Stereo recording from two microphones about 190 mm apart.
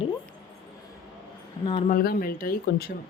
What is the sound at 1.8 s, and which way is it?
Speech, 50° left (ahead or behind).